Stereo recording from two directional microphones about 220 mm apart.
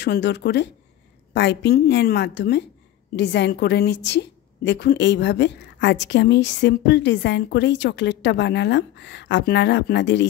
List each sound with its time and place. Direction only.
0.0 s a woman's voice: 50° left (ahead or behind)